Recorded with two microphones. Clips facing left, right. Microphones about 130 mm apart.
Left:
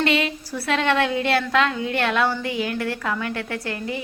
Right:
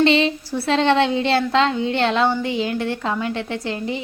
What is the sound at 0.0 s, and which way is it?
A woman's voice, 25° right (ahead or behind).